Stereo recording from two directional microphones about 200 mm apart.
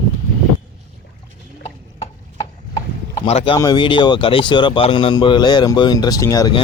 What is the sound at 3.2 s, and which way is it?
Speech, 30° left (ahead or behind).